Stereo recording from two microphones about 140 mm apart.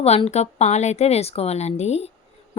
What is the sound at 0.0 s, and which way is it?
A woman's voice, 50° left (ahead or behind).